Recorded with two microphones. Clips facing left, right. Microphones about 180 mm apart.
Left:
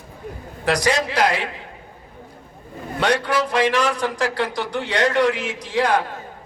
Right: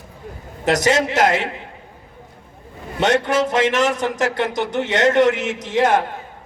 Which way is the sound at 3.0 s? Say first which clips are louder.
Right 3 dB; 20° right (ahead or behind).